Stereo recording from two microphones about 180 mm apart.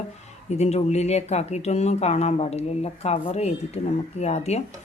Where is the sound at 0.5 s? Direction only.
35° left (ahead or behind).